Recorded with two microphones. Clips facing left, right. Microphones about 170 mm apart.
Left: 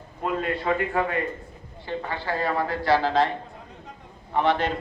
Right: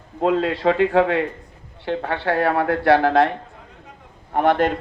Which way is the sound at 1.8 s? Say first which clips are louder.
Right 7 dB; 70° right (ahead or behind).